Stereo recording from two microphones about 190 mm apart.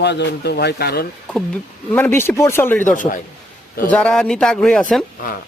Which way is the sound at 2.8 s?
45° left (ahead or behind).